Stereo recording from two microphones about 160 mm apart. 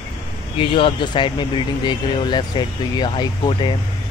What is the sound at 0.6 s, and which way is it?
Speech, 35° left (ahead or behind).